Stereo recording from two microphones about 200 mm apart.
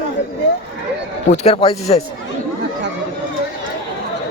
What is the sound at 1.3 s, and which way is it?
Speech, 30° left (ahead or behind).